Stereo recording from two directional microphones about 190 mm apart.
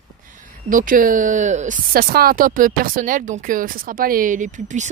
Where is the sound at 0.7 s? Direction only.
45° right (ahead or behind).